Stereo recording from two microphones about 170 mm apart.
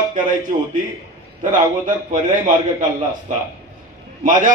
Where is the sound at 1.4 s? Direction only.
50° right (ahead or behind).